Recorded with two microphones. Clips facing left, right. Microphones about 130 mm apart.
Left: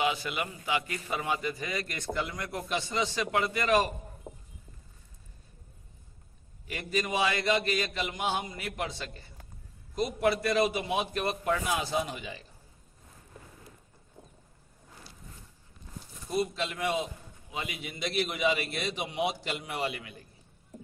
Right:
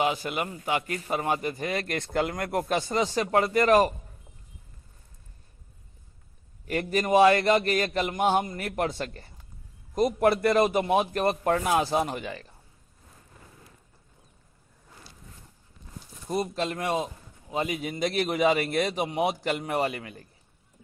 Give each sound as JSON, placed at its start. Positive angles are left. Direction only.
{"t": 0.0, "sound": "a man's voice", "side_deg": -45}
{"t": 6.7, "sound": "a man's voice", "side_deg": -55}
{"t": 16.3, "sound": "a man's voice", "side_deg": -40}